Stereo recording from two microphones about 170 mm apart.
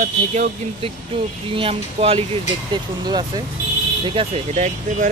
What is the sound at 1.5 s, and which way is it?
Speech, 35° right (ahead or behind).